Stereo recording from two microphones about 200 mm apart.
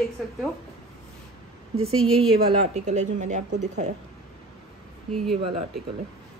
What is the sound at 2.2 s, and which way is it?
A woman's voice, 35° right (ahead or behind).